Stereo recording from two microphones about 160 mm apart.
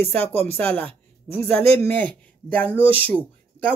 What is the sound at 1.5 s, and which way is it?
Speech, 40° right (ahead or behind).